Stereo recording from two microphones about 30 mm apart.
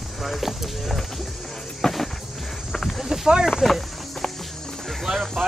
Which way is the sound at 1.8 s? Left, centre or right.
Centre.